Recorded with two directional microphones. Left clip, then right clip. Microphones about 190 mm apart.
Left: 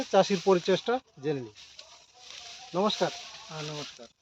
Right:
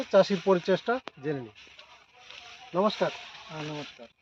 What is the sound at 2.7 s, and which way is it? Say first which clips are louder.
Speech: right 1 dB; 25° left (ahead or behind).